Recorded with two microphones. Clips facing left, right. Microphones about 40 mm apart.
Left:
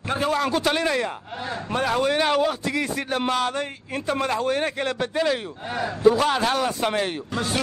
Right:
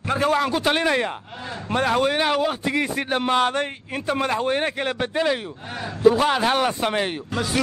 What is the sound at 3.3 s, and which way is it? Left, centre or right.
Speech, right.